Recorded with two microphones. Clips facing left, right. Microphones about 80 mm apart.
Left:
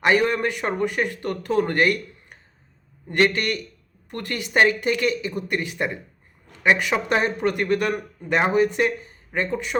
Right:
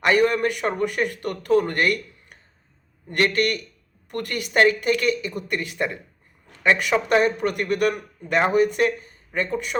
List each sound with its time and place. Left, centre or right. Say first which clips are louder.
0.1 s a man's voice: right 1 dB; left
7.2 s a man's voice: right 1 dB; left